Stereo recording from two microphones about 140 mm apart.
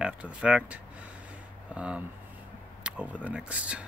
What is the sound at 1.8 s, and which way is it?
Speech, 10° right (ahead or behind).